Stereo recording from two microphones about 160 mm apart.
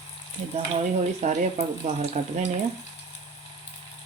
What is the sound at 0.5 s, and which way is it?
Speech, 45° right (ahead or behind).